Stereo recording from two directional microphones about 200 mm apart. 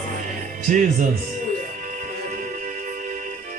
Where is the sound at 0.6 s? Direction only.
40° right (ahead or behind).